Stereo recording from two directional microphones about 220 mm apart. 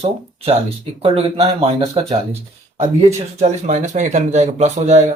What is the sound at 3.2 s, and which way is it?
Speech, 30° right (ahead or behind).